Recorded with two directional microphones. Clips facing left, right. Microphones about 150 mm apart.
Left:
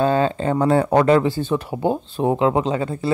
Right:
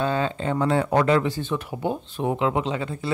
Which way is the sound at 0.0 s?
40° left (ahead or behind).